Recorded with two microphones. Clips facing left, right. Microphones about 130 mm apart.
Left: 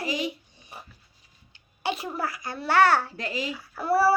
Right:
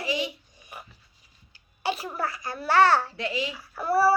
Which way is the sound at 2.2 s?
25° right (ahead or behind).